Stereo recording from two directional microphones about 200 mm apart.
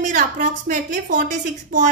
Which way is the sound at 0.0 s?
40° right (ahead or behind).